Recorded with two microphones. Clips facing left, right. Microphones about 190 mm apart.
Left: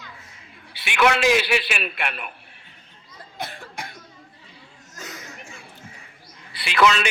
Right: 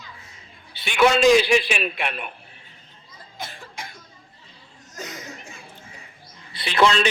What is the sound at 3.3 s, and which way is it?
Cough, 60° left (ahead or behind).